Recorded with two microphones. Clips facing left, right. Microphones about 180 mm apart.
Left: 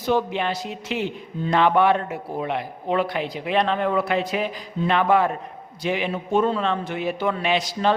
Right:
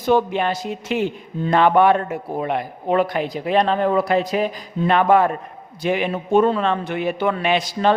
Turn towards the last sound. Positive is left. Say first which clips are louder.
# right 3 dB
turn(degrees=-55)  # may be behind; listen again after turning